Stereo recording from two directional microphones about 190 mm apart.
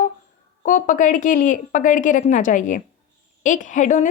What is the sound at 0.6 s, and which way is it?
A woman's voice, 45° left (ahead or behind).